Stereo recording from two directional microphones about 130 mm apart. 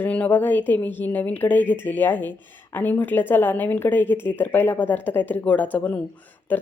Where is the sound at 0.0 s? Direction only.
10° left (ahead or behind).